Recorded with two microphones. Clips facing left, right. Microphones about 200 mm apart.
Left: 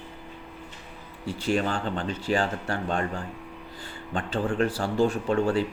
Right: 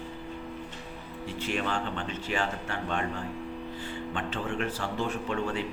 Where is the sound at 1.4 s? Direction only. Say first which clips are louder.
Left 5 dB; 35° left (ahead or behind).